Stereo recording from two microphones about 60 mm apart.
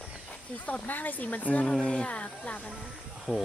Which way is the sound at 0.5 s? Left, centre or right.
Left.